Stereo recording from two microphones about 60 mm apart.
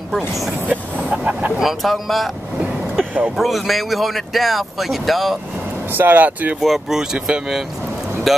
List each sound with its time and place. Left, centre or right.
0.7 s speech: right
1.6 s speech: centre
3.3 s speech: centre
5.9 s speech: right
6.6 s speech: centre
7.0 s speech: centre
8.3 s speech: centre